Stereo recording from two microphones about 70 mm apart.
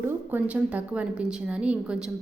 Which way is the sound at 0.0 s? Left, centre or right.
Right.